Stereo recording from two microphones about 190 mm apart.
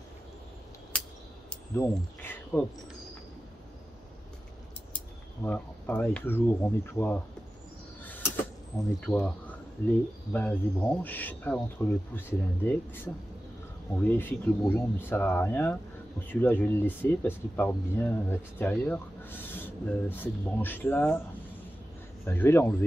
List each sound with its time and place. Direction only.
1.5 s speech: 10° left (ahead or behind)
4.9 s speech: 10° left (ahead or behind)
8.0 s a sound: 10° left (ahead or behind)
9.0 s speech: 10° left (ahead or behind)
22.2 s speech: 10° left (ahead or behind)